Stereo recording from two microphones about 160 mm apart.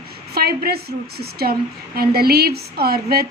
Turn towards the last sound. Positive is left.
turn(degrees=-75)  # may be behind; listen again after turning